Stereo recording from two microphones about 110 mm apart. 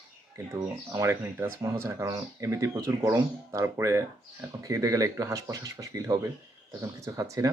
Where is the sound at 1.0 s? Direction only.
20° right (ahead or behind).